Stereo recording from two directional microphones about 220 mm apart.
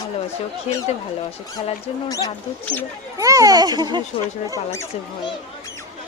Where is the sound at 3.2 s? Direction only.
15° right (ahead or behind).